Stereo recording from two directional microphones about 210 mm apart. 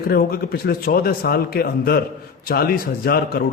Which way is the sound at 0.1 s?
45° left (ahead or behind).